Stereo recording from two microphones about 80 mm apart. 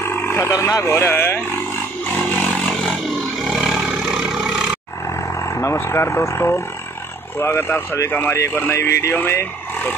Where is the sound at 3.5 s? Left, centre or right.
Centre.